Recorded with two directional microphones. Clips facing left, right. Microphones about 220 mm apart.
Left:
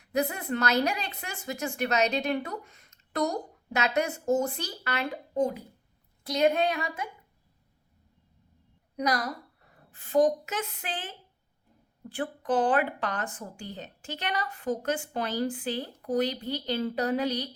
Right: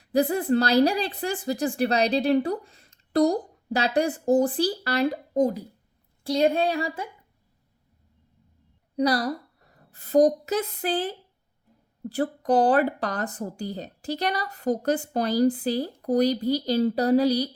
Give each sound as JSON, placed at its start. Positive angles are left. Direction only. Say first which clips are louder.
{"t": 0.0, "sound": "a woman's voice", "louder": "right 7 dB", "side_deg": -35}
{"t": 9.0, "sound": "a woman's voice", "louder": "right 6 dB", "side_deg": -35}